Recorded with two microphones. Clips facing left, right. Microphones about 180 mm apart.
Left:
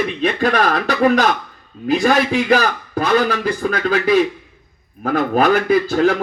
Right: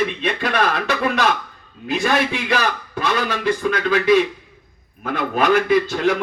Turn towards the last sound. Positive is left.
turn(degrees=40)  # may be behind; listen again after turning